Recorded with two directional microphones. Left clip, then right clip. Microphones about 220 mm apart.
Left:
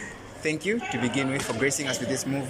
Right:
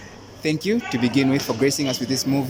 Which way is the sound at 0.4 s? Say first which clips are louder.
Right 4 dB; 25° right (ahead or behind).